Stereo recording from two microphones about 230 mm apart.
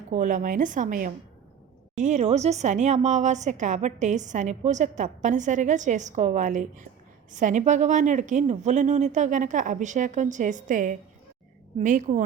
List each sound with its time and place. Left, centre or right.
0.1 s a woman's voice: right